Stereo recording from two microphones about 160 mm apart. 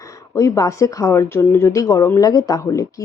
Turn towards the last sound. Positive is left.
turn(degrees=20)  # may be behind; listen again after turning